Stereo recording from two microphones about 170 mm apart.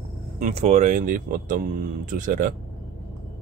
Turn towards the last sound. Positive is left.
turn(degrees=-50)  # may be behind; listen again after turning